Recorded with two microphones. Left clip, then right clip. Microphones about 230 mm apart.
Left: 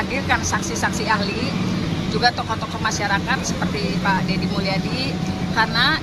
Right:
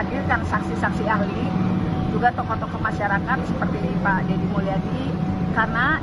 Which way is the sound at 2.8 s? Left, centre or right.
Left.